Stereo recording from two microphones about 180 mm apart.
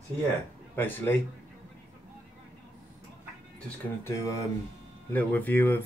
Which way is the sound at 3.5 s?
15° left (ahead or behind).